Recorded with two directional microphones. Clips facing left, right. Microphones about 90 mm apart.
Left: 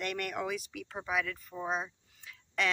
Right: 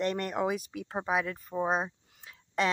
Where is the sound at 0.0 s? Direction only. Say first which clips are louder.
Right 6 dB; 30° right (ahead or behind).